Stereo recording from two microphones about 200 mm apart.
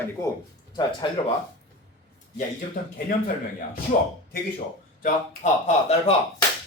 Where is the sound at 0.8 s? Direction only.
25° left (ahead or behind).